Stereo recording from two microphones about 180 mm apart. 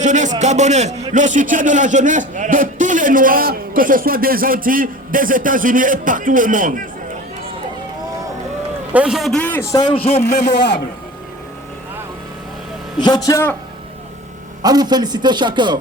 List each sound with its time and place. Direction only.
0.0 s a man's voice: 40° right (ahead or behind)
8.9 s a man's voice: 5° right (ahead or behind)
9.7 s a man's voice: 30° left (ahead or behind)
10.5 s a man's voice: 70° left (ahead or behind)
13.0 s a man's voice: 20° left (ahead or behind)
14.6 s a man's voice: 20° right (ahead or behind)